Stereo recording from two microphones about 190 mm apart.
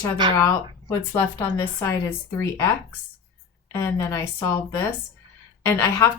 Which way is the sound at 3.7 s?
15° left (ahead or behind).